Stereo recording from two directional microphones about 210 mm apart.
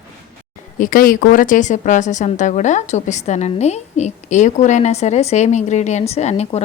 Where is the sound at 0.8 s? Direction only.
40° left (ahead or behind).